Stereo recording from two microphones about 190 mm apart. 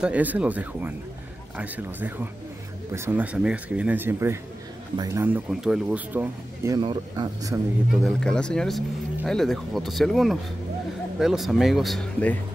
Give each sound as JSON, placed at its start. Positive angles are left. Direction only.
{"t": 0.0, "sound": "speech", "side_deg": -10}
{"t": 6.8, "sound": "speech", "side_deg": -25}
{"t": 7.9, "sound": "speech", "side_deg": 0}